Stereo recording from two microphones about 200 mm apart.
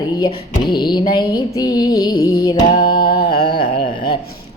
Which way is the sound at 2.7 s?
45° left (ahead or behind).